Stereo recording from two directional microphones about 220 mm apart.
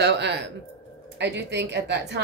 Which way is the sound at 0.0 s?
50° right (ahead or behind).